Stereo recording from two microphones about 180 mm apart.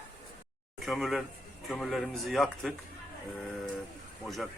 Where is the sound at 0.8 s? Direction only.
Centre (ahead or behind).